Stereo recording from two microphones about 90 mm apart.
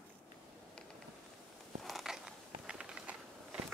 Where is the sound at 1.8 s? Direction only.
Centre (ahead or behind).